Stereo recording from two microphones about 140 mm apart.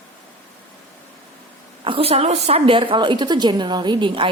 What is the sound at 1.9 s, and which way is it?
Speech, 45° right (ahead or behind).